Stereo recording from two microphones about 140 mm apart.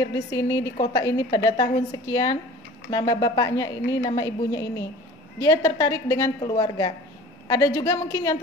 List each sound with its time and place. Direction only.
0.3 s a woman's voice: 25° left (ahead or behind)